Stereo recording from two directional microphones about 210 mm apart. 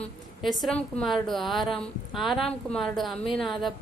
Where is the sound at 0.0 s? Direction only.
Centre (ahead or behind).